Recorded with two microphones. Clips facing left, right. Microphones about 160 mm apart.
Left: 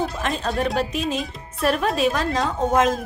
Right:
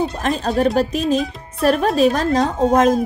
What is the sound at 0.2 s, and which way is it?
Speech, 40° right (ahead or behind).